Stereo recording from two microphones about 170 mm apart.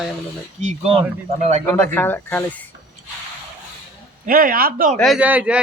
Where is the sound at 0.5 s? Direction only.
40° right (ahead or behind).